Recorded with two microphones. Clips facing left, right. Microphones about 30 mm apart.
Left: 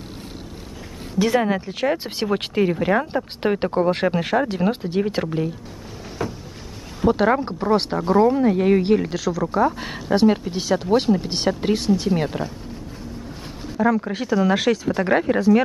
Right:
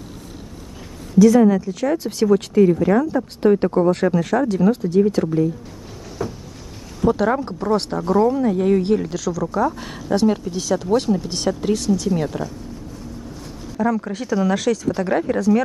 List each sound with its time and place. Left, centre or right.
1.1 s speech: left
6.2 s vehicle: left
7.0 s speech: left
13.7 s speech: centre